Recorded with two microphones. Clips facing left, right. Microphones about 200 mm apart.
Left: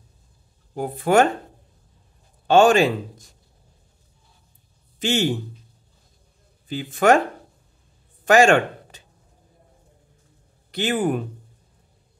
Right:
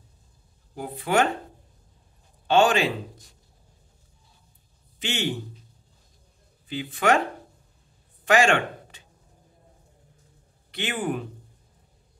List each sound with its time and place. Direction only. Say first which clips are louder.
0.7 s speech: left 6 dB; 45° left (ahead or behind)
2.4 s speech: left 5 dB; 45° left (ahead or behind)
4.9 s speech: left 7 dB; 45° left (ahead or behind)
6.7 s speech: left 5 dB; 45° left (ahead or behind)
8.3 s speech: left 5 dB; 45° left (ahead or behind)
10.7 s speech: left 6 dB; 40° left (ahead or behind)